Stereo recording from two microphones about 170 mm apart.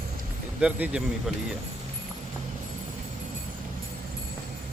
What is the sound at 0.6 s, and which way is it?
Speech, 5° right (ahead or behind).